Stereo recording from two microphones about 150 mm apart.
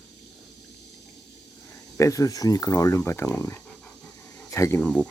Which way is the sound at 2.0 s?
20° left (ahead or behind).